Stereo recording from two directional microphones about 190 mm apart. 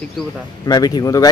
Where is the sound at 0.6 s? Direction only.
20° left (ahead or behind).